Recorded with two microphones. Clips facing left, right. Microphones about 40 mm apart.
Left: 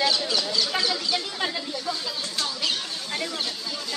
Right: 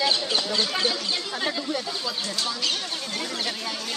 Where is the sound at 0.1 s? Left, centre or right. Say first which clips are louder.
Even; right.